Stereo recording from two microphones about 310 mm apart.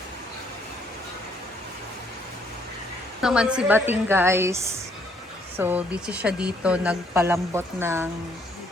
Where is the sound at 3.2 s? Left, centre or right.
Centre.